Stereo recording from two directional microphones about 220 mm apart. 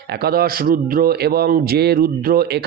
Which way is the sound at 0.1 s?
45° right (ahead or behind).